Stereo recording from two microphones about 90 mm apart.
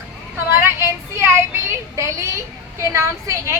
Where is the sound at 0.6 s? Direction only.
30° right (ahead or behind).